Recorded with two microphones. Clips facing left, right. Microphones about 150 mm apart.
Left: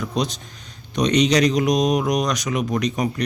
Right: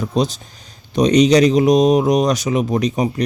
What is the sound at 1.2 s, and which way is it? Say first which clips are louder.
Speech: right 6 dB; 30° right (ahead or behind).